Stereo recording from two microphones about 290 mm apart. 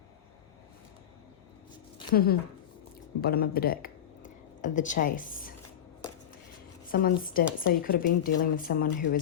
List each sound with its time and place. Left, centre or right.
2.1 s a woman's voice: left
6.8 s a woman's voice: left